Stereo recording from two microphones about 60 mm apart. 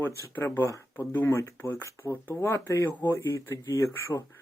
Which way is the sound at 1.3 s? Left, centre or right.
Left.